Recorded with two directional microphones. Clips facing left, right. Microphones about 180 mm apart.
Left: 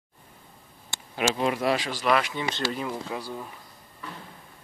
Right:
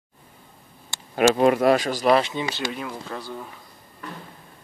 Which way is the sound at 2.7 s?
Centre (ahead or behind).